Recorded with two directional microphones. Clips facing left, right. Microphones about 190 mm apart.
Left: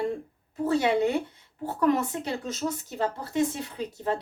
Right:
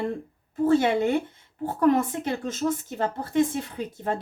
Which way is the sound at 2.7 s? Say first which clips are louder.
Right 3 dB; 50° right (ahead or behind).